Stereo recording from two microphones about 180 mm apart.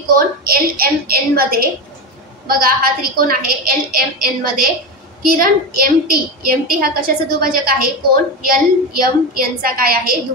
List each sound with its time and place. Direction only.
0.1 s a woman's voice: 55° right (ahead or behind)